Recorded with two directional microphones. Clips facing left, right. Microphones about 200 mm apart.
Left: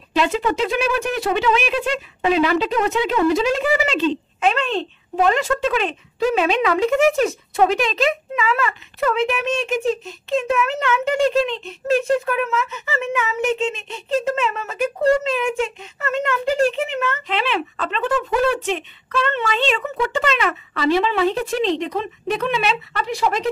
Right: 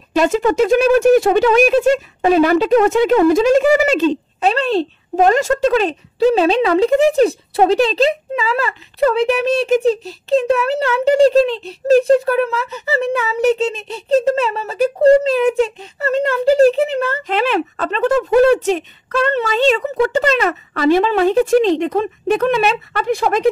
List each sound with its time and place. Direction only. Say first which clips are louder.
0.1 s speech: right 5 dB; 45° right (ahead or behind)